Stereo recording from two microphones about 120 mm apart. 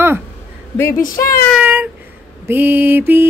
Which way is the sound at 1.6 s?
15° right (ahead or behind).